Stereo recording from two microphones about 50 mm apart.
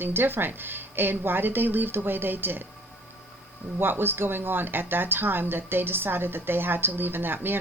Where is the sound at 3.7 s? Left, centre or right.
Right.